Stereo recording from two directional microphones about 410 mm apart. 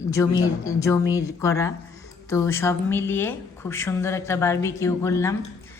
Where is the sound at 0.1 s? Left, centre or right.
Centre.